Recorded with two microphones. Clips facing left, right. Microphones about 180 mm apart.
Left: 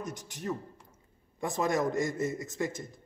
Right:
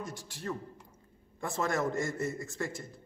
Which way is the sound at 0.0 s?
20° left (ahead or behind).